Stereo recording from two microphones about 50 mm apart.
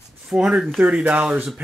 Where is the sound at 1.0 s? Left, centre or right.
Right.